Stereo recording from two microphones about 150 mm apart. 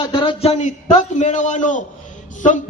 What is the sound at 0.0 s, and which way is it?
A man's voice, 30° left (ahead or behind).